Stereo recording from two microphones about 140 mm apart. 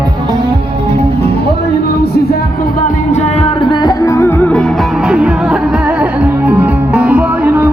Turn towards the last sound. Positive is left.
turn(degrees=-10)  # may be behind; listen again after turning